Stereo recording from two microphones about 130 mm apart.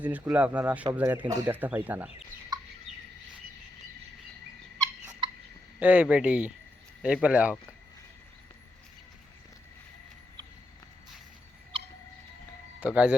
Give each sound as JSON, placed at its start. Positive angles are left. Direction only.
{"t": 0.0, "sound": "speech", "side_deg": -10}
{"t": 2.5, "sound": "fowl", "side_deg": -30}
{"t": 5.8, "sound": "speech", "side_deg": -10}
{"t": 12.8, "sound": "speech", "side_deg": -10}